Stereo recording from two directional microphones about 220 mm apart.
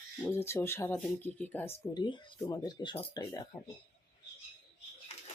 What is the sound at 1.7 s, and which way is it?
Speech, 20° left (ahead or behind).